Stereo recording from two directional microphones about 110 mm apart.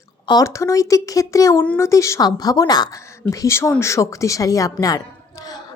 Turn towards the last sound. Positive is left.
turn(degrees=35)  # may be behind; listen again after turning